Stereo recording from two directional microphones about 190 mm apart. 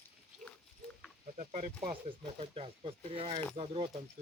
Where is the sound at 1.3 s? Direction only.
45° right (ahead or behind).